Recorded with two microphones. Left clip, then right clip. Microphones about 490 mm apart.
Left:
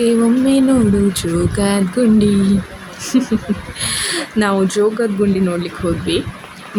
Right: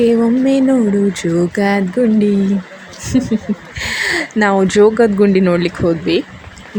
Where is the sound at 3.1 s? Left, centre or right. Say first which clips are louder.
Even; left.